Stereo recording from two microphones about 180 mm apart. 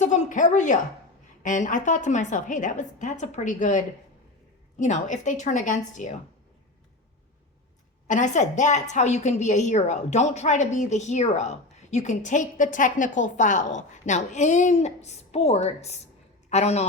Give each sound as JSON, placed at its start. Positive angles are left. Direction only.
{"t": 0.0, "sound": "a woman's voice", "side_deg": 40}
{"t": 8.0, "sound": "a woman's voice", "side_deg": 45}